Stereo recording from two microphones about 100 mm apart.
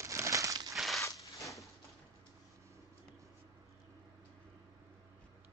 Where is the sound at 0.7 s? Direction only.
Centre (ahead or behind).